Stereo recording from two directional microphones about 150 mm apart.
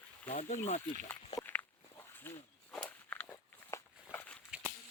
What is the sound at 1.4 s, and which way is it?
Walk, 15° left (ahead or behind).